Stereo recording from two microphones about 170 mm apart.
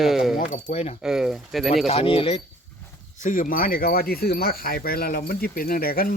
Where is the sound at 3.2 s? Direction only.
55° left (ahead or behind).